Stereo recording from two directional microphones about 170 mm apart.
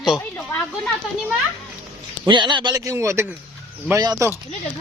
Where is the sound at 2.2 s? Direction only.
25° right (ahead or behind).